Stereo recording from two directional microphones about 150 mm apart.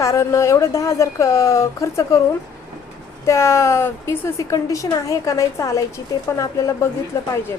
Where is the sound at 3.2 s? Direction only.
20° left (ahead or behind).